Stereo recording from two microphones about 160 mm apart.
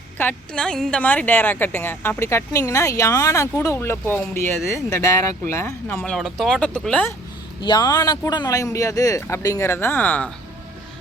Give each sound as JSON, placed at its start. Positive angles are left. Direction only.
{"t": 0.2, "sound": "a woman's voice", "side_deg": 10}
{"t": 6.1, "sound": "speech", "side_deg": 0}
{"t": 7.6, "sound": "speech", "side_deg": 25}